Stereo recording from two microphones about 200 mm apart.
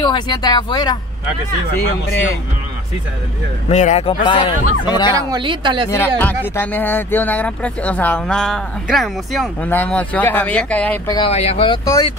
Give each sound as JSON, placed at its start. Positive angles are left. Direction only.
{"t": 0.0, "sound": "speech", "side_deg": 20}
{"t": 3.6, "sound": "speech", "side_deg": 35}
{"t": 5.3, "sound": "speech", "side_deg": -25}
{"t": 5.9, "sound": "speech", "side_deg": 10}
{"t": 11.1, "sound": "speech", "side_deg": 25}